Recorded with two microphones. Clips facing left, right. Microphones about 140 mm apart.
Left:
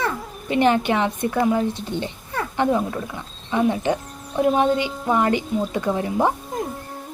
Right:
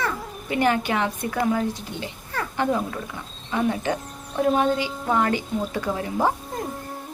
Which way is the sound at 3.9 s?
20° left (ahead or behind).